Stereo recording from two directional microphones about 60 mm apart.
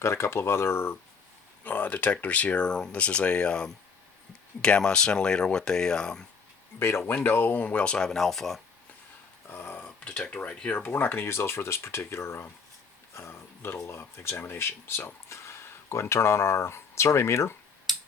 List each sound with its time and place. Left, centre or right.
0.0 s speech: left
1.6 s speech: left; by 6.2 s centre
6.7 s speech: left
7.6 s speech: left; by 8.6 s centre
9.5 s a sound: left
9.8 s speech: centre
10.9 s speech: left
13.6 s speech: left